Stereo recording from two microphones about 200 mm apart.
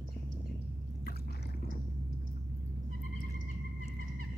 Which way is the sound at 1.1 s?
55° left (ahead or behind).